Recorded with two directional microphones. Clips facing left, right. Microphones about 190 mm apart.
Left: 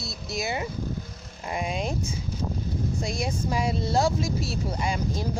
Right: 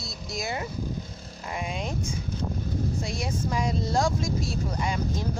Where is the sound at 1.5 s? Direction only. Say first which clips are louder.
Left 3 dB; 20° left (ahead or behind).